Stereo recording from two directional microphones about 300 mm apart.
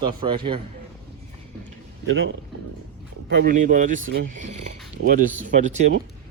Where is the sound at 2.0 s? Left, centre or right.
Right.